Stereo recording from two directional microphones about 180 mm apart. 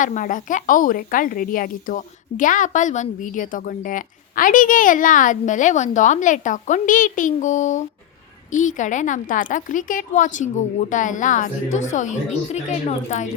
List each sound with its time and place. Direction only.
0.0 s a woman's voice: 45° left (ahead or behind)